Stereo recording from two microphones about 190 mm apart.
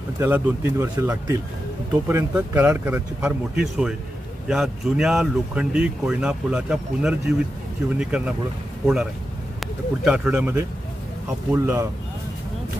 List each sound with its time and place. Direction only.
0.2 s speech: 10° right (ahead or behind)